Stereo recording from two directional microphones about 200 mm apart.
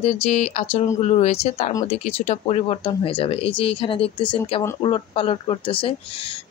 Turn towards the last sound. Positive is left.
turn(degrees=25)  # may be behind; listen again after turning